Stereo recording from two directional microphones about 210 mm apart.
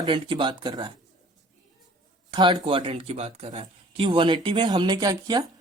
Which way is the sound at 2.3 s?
20° right (ahead or behind).